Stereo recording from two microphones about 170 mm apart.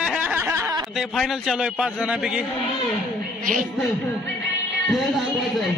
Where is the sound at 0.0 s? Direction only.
5° right (ahead or behind).